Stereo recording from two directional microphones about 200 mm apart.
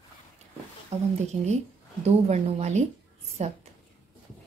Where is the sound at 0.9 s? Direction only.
30° right (ahead or behind).